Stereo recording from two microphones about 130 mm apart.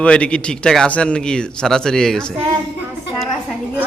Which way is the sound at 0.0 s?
10° left (ahead or behind).